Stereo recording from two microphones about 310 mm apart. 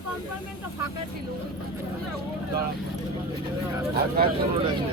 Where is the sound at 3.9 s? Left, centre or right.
Right.